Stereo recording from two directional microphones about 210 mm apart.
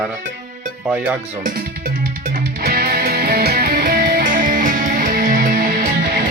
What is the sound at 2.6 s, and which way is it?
Music, 45° right (ahead or behind).